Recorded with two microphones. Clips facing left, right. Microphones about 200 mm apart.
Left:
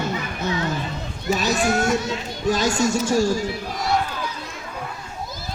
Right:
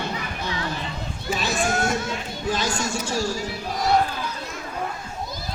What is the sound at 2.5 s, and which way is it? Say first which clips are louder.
Speech: left 6 dB; 45° left (ahead or behind).